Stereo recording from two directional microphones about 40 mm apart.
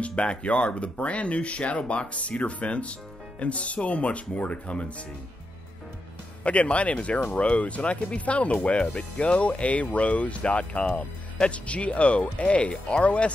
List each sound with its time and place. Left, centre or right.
0.0 s speech: left
6.4 s speech: left